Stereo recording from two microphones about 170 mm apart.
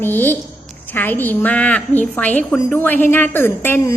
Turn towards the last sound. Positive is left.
turn(degrees=10)  # may be behind; listen again after turning